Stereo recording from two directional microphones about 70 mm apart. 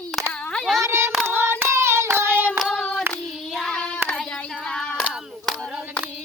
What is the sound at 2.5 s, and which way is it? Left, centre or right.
Hands, centre.